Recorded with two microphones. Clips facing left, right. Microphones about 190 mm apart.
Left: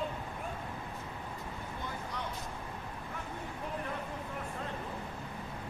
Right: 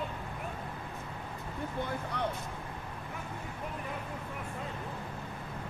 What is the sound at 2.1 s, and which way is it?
Vehicle, 60° right (ahead or behind).